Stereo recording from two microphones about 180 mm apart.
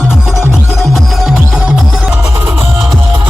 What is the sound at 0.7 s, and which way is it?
Music, centre (ahead or behind).